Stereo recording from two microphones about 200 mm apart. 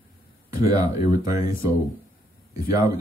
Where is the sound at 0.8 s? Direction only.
15° right (ahead or behind).